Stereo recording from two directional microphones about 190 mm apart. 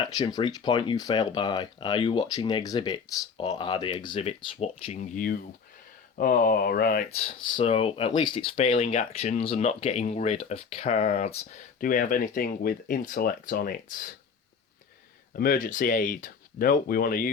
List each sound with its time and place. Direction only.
0.1 s speech: 20° left (ahead or behind)
4.9 s speech: 45° left (ahead or behind)
7.1 s speech: 30° left (ahead or behind)
11.8 s speech: 45° left (ahead or behind)
15.3 s speech: 50° left (ahead or behind)